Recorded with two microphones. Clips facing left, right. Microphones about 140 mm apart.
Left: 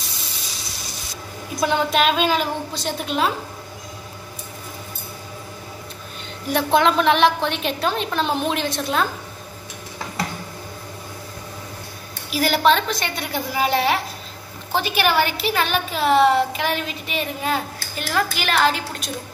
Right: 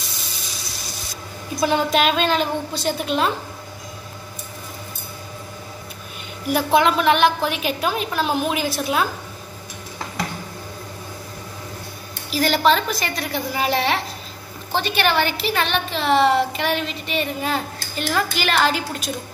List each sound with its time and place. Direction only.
1.6 s a woman's voice: centre (ahead or behind)
6.5 s a woman's voice: 5° right (ahead or behind)
12.3 s a woman's voice: 5° left (ahead or behind)